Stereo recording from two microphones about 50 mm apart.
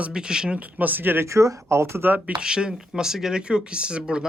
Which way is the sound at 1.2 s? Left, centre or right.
Right.